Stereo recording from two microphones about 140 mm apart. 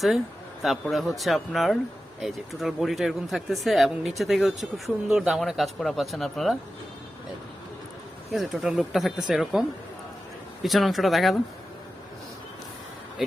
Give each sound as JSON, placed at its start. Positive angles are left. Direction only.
{"t": 0.6, "sound": "speech", "side_deg": 0}
{"t": 8.3, "sound": "speech", "side_deg": -5}